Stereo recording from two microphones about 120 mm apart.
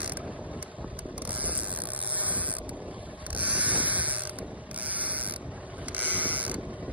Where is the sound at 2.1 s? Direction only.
15° right (ahead or behind).